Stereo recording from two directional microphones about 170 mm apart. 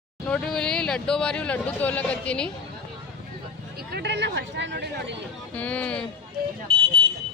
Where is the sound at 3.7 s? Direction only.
75° right (ahead or behind).